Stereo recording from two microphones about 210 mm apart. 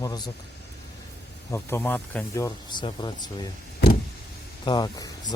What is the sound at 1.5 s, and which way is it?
Speech, 10° left (ahead or behind).